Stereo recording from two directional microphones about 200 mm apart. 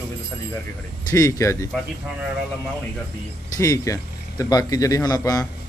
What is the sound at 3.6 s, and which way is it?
Speech, 15° left (ahead or behind).